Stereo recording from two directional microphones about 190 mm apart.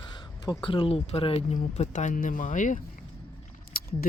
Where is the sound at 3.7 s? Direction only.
50° left (ahead or behind).